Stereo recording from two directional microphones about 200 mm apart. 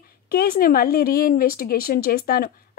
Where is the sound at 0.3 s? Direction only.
45° left (ahead or behind).